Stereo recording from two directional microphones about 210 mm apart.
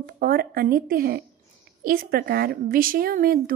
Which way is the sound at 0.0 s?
45° right (ahead or behind).